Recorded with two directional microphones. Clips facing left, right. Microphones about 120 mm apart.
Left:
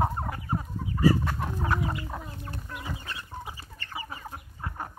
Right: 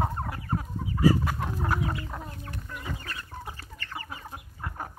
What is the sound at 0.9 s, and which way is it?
Chicken, 10° right (ahead or behind).